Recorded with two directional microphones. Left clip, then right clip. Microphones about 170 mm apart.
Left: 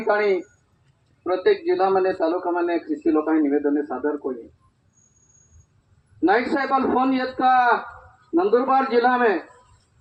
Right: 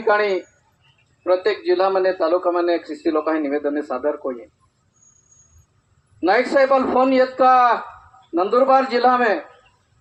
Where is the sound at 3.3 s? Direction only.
20° right (ahead or behind).